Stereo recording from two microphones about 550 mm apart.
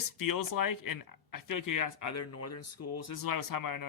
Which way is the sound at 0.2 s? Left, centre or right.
Left.